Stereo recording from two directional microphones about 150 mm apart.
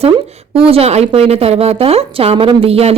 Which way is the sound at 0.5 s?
40° right (ahead or behind).